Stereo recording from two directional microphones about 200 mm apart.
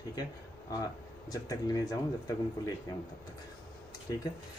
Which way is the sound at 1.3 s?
20° left (ahead or behind).